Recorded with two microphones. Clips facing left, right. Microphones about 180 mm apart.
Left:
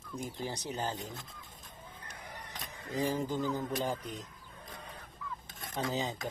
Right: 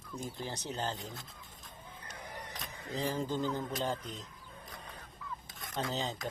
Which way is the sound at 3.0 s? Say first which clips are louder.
Left 2 dB; 15° left (ahead or behind).